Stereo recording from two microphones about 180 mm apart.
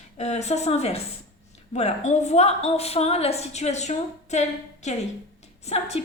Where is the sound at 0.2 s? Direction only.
40° left (ahead or behind).